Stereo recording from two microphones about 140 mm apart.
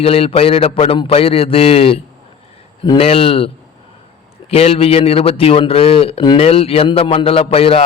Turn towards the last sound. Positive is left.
turn(degrees=45)  # may be behind; listen again after turning